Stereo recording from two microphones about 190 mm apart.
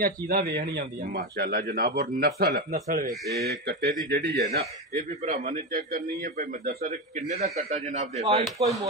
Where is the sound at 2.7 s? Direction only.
45° right (ahead or behind).